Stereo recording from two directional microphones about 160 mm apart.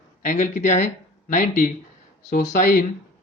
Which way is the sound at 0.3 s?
50° left (ahead or behind).